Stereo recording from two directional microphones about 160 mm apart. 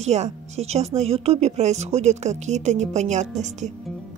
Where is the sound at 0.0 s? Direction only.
45° right (ahead or behind).